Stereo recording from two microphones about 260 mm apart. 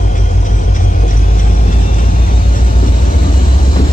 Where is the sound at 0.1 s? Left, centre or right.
Left.